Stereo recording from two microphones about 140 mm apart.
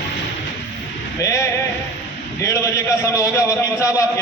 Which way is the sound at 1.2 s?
20° left (ahead or behind).